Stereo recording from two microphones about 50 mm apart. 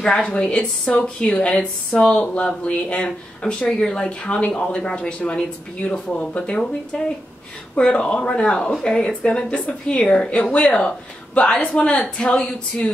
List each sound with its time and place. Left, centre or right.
0.0 s speech: left